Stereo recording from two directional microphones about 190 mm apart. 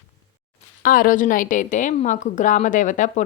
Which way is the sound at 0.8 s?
45° left (ahead or behind).